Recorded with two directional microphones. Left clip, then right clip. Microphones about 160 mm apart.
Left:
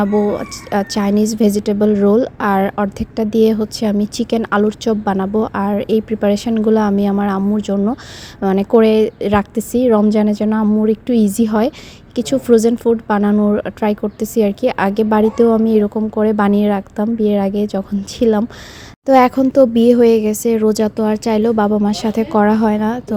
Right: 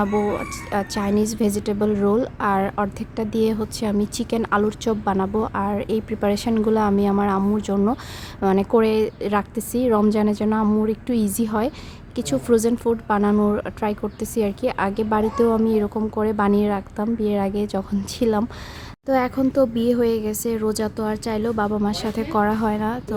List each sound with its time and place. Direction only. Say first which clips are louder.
0.0 s a woman's voice: left 6 dB; 25° left (ahead or behind)
8.4 s a woman's voice: left 6 dB; 25° left (ahead or behind)
10.8 s a woman's voice: left 8 dB; 25° left (ahead or behind)
19.0 s speech: left 10 dB; 40° left (ahead or behind)